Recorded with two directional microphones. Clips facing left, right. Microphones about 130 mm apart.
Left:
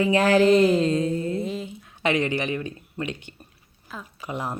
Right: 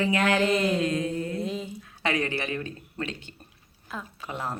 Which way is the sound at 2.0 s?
20° left (ahead or behind).